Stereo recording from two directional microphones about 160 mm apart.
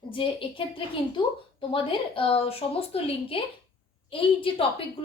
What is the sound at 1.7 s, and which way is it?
A woman's voice, 35° left (ahead or behind).